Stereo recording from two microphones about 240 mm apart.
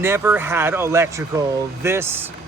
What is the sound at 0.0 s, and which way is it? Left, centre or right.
Speech, centre.